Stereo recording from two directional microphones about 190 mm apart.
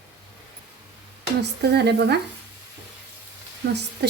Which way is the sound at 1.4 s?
60° right (ahead or behind).